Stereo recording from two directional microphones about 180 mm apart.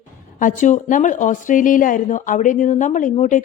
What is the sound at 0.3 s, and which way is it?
Speech, 45° left (ahead or behind).